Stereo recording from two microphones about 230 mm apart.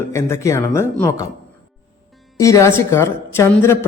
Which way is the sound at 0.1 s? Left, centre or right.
Centre.